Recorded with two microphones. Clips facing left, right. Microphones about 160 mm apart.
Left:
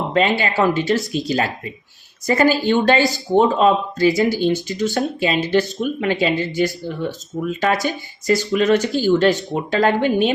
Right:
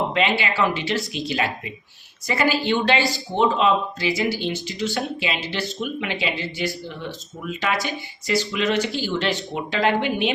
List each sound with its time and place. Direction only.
0.1 s speech: 45° left (ahead or behind)